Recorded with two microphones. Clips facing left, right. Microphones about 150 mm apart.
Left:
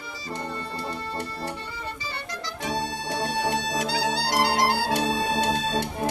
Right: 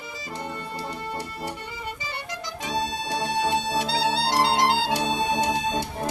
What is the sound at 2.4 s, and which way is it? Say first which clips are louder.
Music: even; 15° right (ahead or behind).